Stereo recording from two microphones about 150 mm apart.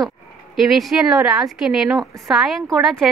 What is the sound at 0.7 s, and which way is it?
A woman's voice, centre (ahead or behind).